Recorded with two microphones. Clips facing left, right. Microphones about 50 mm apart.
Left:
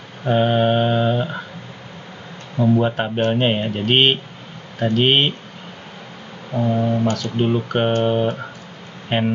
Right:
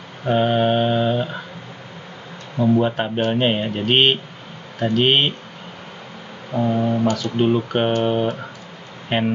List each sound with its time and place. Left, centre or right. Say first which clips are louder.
0.2 s mantra: left 1 dB; centre
2.5 s speech: even; centre
6.5 s speech: even; centre